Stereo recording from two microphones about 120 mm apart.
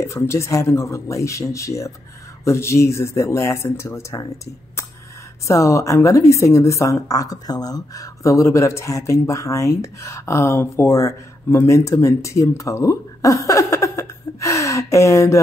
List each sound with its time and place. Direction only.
0.0 s a woman's voice: 25° left (ahead or behind)
5.5 s a woman's voice: 25° left (ahead or behind)